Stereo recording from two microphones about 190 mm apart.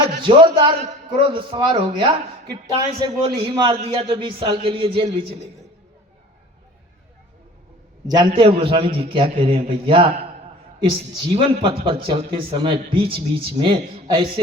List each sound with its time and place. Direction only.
0.2 s speech: 25° right (ahead or behind)
8.0 s speech: 20° right (ahead or behind)